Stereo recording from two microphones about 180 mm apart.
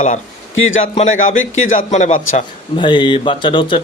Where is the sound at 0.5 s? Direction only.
90° left.